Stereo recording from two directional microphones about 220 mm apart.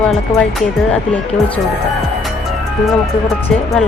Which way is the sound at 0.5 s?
5° left (ahead or behind).